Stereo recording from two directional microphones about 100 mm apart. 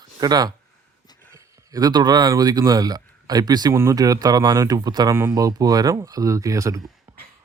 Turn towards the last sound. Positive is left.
turn(degrees=-35)  # may be behind; listen again after turning